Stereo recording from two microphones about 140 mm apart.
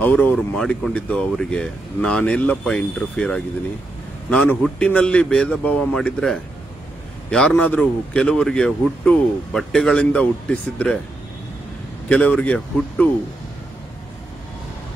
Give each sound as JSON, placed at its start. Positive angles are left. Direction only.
{"t": 0.0, "sound": "a man's voice", "side_deg": 10}
{"t": 12.1, "sound": "a man's voice", "side_deg": 10}